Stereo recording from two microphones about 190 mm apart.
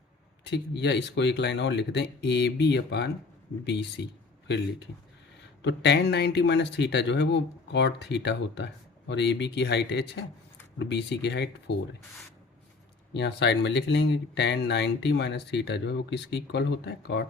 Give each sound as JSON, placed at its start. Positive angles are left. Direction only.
{"t": 0.4, "sound": "speech", "side_deg": 60}
{"t": 13.1, "sound": "speech", "side_deg": 65}